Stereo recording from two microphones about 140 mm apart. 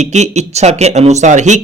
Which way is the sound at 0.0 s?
55° right (ahead or behind).